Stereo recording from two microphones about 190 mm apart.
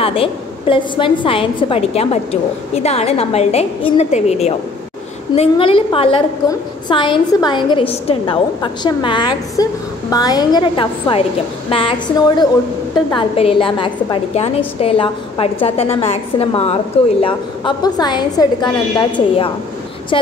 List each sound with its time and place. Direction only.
0.0 s a woman's voice: 30° left (ahead or behind)
13.1 s a woman's voice: 30° left (ahead or behind)